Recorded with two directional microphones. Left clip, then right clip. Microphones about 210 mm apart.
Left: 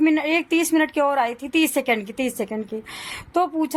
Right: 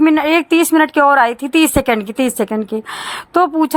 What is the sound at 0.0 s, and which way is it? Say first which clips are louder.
A woman's voice: right 7 dB; 15° right (ahead or behind).